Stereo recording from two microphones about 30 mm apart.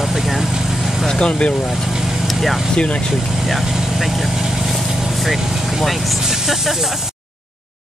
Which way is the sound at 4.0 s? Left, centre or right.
Centre.